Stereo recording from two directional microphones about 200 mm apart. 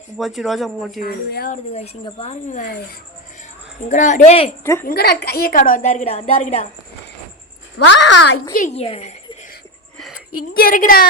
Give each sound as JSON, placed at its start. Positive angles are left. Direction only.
{"t": 0.2, "sound": "speech", "side_deg": 0}
{"t": 0.9, "sound": "a woman's voice", "side_deg": 50}
{"t": 1.7, "sound": "a woman's voice", "side_deg": 30}
{"t": 3.8, "sound": "a woman's voice", "side_deg": 35}
{"t": 4.6, "sound": "a woman's voice", "side_deg": 10}
{"t": 4.9, "sound": "a woman's voice", "side_deg": 50}
{"t": 7.9, "sound": "a woman's voice", "side_deg": 65}
{"t": 8.5, "sound": "speech", "side_deg": 35}
{"t": 10.3, "sound": "a woman's voice", "side_deg": 45}